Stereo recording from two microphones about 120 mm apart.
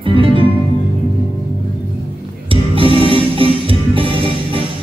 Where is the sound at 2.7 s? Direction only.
50° right (ahead or behind).